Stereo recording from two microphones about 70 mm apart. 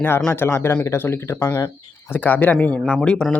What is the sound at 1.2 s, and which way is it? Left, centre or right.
Speech, left.